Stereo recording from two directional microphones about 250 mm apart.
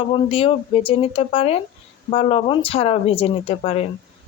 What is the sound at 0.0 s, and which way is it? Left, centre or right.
Speech, left.